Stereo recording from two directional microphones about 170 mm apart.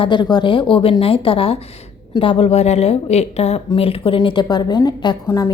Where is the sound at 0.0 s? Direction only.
25° left (ahead or behind).